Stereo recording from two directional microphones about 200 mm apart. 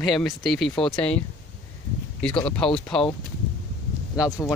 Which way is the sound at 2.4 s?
5° left (ahead or behind).